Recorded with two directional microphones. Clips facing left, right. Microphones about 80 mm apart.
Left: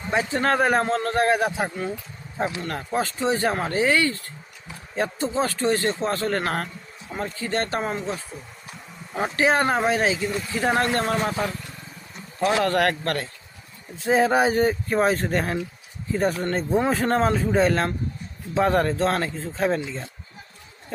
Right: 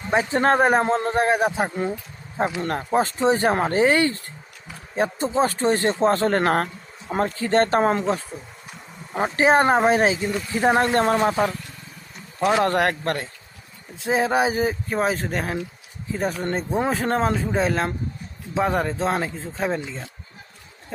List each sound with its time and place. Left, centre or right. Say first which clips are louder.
0.1 s speech: right 3 dB; right
2.4 s speech: right 3 dB; right
9.3 s speech: right 4 dB; right
14.0 s speech: left 1 dB; centre